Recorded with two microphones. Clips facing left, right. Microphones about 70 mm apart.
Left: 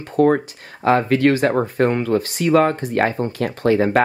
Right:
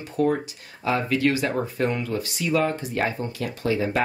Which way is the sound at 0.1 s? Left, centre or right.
Left.